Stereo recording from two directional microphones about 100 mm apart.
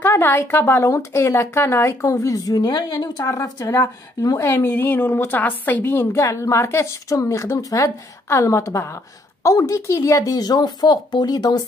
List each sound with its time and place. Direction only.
0.0 s speech: 25° left (ahead or behind); by 11.6 s 40° left (ahead or behind)